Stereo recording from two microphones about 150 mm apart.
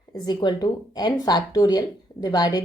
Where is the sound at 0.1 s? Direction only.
30° left (ahead or behind).